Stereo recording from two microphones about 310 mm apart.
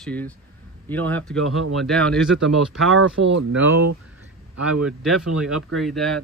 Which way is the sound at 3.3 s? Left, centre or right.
Right.